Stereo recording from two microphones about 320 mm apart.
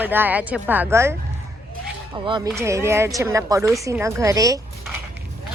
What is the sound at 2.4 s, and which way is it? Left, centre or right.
Speech, centre.